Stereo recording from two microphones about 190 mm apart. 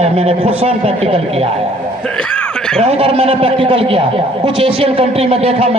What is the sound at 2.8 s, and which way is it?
A man's voice, 30° right (ahead or behind).